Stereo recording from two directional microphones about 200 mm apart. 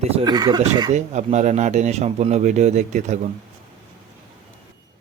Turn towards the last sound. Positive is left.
turn(degrees=-35)  # may be behind; listen again after turning